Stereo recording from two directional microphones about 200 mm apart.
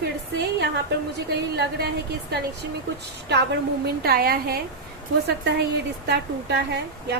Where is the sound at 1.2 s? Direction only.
50° right (ahead or behind).